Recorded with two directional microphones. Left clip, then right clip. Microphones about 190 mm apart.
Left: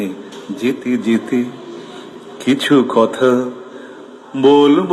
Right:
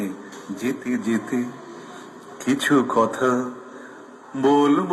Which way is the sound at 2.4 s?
15° left (ahead or behind).